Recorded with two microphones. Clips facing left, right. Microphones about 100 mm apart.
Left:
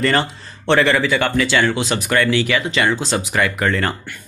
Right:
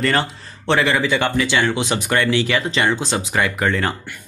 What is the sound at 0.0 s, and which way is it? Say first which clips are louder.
Speech: left 2 dB; centre (ahead or behind).